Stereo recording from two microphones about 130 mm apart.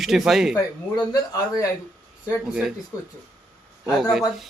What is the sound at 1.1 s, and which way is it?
Speech, 25° left (ahead or behind).